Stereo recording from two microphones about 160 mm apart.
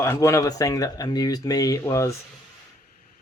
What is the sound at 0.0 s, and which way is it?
Speech, 15° left (ahead or behind).